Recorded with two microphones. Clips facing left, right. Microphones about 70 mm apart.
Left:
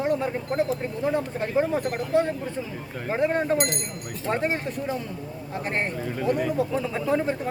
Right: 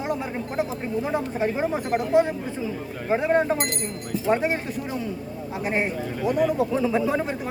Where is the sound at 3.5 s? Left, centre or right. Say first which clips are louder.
Left 2 dB; right.